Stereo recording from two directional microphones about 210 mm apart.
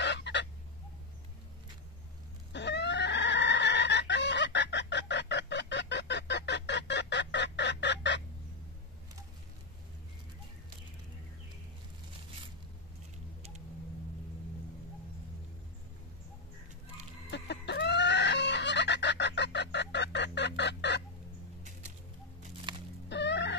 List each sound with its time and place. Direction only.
0.0 s fowl: 55° left (ahead or behind)
2.5 s chicken: 55° left (ahead or behind)
17.3 s chicken: 55° left (ahead or behind)
22.7 s music: 20° right (ahead or behind)
23.0 s chicken: 55° left (ahead or behind)